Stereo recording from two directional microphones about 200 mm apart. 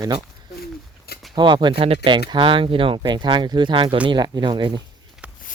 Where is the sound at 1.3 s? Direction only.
20° right (ahead or behind).